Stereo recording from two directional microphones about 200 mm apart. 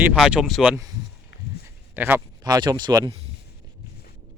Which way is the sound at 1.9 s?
10° right (ahead or behind).